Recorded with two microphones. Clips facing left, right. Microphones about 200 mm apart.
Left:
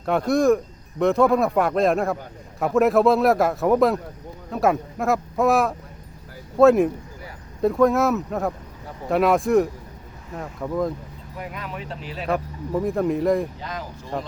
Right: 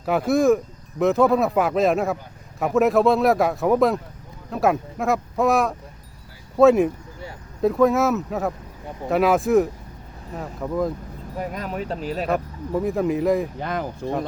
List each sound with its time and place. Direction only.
0.0 s speech: 5° right (ahead or behind)
11.3 s speech: 40° right (ahead or behind)
12.3 s speech: centre (ahead or behind)
13.6 s speech: 55° right (ahead or behind)